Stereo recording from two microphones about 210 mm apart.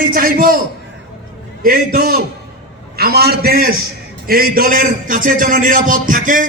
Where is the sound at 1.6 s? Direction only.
45° right (ahead or behind).